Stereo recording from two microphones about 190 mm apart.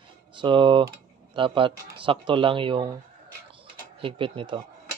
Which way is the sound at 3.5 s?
30° right (ahead or behind).